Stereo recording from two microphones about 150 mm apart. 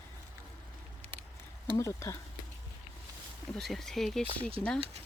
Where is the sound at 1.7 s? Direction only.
20° left (ahead or behind).